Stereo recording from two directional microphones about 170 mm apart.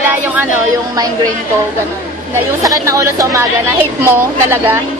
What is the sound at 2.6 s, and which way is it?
A woman's voice, 20° right (ahead or behind).